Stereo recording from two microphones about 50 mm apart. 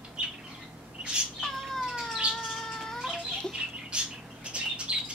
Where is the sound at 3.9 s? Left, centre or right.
Right.